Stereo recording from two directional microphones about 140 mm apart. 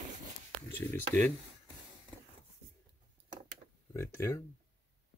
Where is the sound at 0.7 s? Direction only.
15° left (ahead or behind).